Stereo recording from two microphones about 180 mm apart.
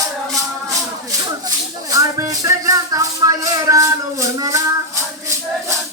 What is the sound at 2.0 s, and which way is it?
Speech, 20° right (ahead or behind).